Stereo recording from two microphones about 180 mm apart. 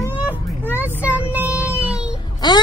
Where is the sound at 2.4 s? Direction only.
25° left (ahead or behind).